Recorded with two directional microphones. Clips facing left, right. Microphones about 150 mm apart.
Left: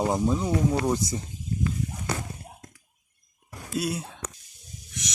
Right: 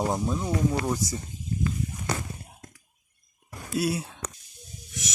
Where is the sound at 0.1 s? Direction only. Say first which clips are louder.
Left 3 dB; 5° left (ahead or behind).